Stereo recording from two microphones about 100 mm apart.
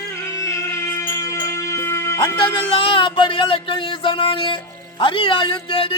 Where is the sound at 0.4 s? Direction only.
30° left (ahead or behind).